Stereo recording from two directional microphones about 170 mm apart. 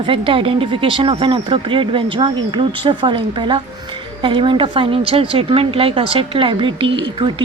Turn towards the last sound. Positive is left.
turn(degrees=-30)  # may be behind; listen again after turning